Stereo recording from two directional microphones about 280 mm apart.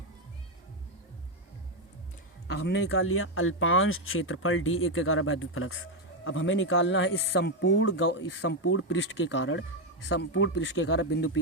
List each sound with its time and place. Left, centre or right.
2.5 s speech: left